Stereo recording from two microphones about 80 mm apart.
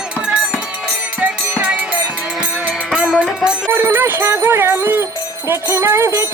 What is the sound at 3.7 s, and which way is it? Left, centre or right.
Jingle bell, right.